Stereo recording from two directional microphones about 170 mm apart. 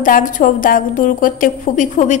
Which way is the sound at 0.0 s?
50° left (ahead or behind).